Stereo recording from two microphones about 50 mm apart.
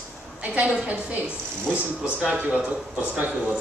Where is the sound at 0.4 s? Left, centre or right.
Right.